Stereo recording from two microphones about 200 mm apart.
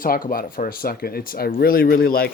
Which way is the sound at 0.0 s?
45° left (ahead or behind).